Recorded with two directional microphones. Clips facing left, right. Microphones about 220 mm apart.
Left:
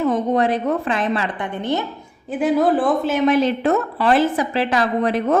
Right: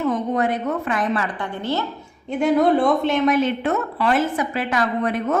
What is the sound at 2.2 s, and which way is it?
A man's voice, 5° left (ahead or behind).